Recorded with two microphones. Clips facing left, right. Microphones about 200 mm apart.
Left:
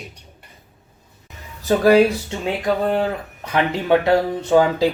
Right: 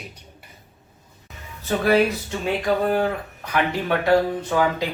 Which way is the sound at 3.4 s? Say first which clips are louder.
Left 3 dB; 25° left (ahead or behind).